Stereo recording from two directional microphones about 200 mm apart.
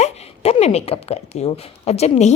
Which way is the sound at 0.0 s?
30° left (ahead or behind).